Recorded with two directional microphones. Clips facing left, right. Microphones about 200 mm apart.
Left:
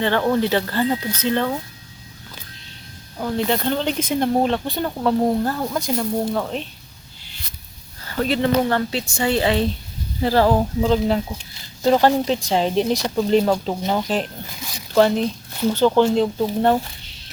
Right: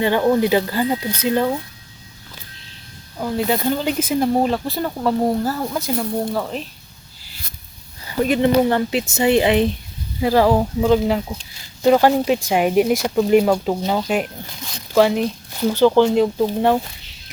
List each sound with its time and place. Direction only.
0.0 s speech: 15° right (ahead or behind)
3.2 s speech: 5° right (ahead or behind)
7.2 s a sound: 5° right (ahead or behind)
8.0 s speech: 15° right (ahead or behind)